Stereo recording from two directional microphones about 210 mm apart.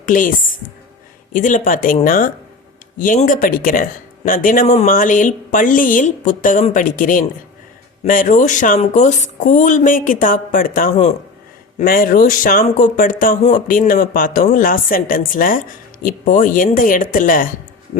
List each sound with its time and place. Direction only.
0.0 s speech: 40° left (ahead or behind)